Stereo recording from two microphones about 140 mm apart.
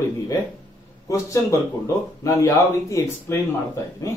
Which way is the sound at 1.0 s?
20° left (ahead or behind).